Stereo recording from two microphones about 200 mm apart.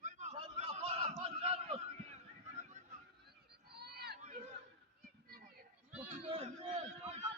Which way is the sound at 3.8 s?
55° right (ahead or behind).